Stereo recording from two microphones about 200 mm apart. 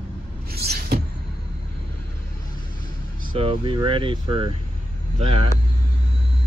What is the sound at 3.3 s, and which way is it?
Speech, 25° right (ahead or behind).